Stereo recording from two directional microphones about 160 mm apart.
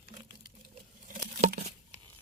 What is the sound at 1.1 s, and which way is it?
Patter, 50° right (ahead or behind).